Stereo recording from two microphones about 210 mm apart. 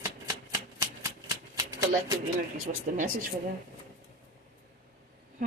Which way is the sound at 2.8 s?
40° right (ahead or behind).